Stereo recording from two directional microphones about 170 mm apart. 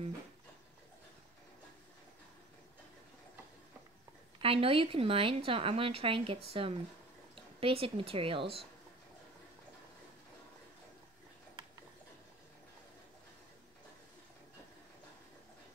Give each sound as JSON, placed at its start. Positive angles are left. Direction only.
{"t": 4.4, "sound": "a woman's voice", "side_deg": -30}